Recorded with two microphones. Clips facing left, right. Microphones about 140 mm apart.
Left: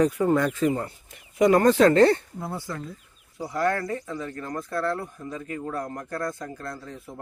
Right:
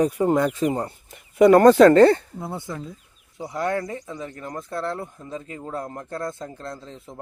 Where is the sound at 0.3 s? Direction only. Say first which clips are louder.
Right 2 dB; 15° right (ahead or behind).